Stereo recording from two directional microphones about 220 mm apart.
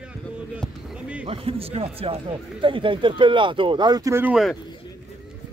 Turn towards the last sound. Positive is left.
turn(degrees=0)  # may be behind; listen again after turning